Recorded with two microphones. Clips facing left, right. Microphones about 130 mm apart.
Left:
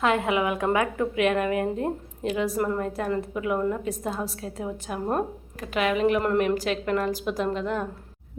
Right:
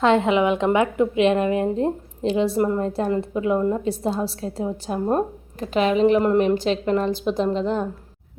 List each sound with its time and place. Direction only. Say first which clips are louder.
0.0 s a woman's voice: right 6 dB; 25° right (ahead or behind)